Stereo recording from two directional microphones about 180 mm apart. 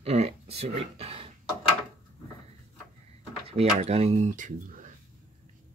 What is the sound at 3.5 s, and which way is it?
Speech, 35° right (ahead or behind).